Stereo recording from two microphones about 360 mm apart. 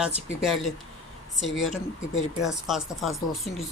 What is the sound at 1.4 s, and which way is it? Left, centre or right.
Speech, left.